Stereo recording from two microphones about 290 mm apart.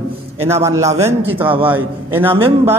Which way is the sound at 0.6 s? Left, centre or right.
Centre.